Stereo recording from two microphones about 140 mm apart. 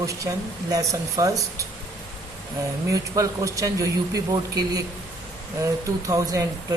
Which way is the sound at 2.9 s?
25° right (ahead or behind).